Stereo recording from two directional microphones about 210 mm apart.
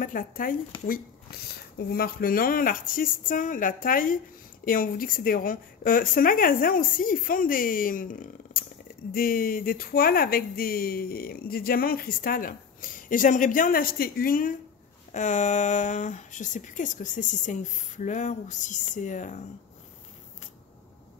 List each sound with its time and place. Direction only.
0.0 s speech: 40° left (ahead or behind)
1.8 s speech: 45° left (ahead or behind)